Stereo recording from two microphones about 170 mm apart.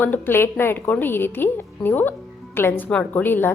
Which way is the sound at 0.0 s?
10° left (ahead or behind).